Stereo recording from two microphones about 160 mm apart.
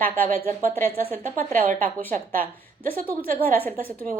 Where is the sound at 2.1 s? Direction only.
60° right (ahead or behind).